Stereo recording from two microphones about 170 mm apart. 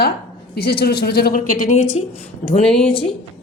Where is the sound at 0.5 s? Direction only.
65° left (ahead or behind); by 2.0 s 40° left (ahead or behind).